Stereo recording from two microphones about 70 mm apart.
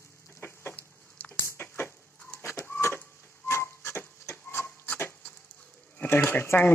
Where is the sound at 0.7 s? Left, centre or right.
Left.